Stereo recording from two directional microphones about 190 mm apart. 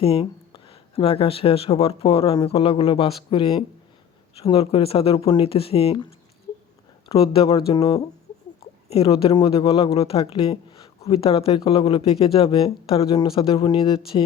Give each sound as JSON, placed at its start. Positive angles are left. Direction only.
{"t": 0.0, "sound": "speech", "side_deg": 30}